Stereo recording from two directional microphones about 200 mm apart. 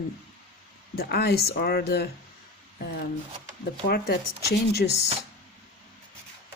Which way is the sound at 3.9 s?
50° left (ahead or behind).